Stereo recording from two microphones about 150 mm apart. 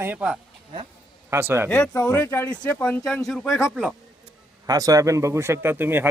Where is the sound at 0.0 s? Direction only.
10° right (ahead or behind).